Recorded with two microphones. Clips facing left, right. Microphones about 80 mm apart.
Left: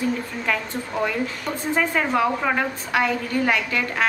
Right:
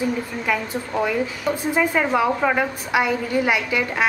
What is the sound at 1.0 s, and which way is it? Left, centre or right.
Speech, centre.